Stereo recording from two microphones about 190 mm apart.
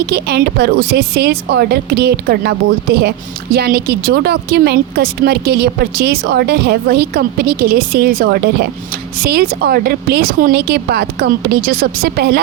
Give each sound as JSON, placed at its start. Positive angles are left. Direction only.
{"t": 0.0, "sound": "a woman's voice", "side_deg": -60}